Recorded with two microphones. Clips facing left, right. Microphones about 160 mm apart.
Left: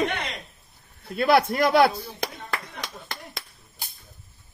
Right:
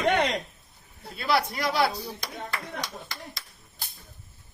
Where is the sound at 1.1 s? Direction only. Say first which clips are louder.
Left 7 dB; 55° left (ahead or behind).